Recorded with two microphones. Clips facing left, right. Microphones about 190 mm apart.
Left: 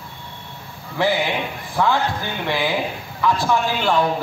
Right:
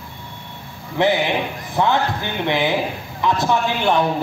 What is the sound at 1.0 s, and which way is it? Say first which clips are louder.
A man's voice: right 2 dB; 20° right (ahead or behind).